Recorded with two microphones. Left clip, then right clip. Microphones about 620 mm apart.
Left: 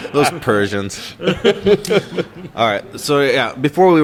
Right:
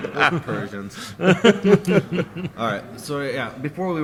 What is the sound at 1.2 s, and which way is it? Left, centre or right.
Chuckle, right.